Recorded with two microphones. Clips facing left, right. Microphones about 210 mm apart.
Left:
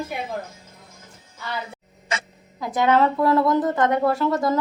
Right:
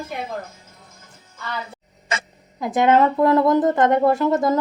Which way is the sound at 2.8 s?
20° right (ahead or behind).